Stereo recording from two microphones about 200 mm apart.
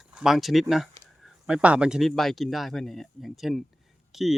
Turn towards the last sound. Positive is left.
turn(degrees=0)  # may be behind; listen again after turning